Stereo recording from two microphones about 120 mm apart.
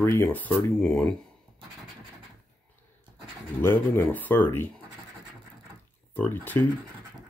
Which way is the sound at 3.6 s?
15° left (ahead or behind).